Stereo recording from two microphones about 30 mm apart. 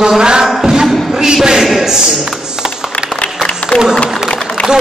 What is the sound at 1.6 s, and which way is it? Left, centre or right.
Speech, centre.